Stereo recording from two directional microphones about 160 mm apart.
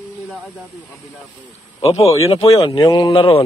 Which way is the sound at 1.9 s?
40° left (ahead or behind).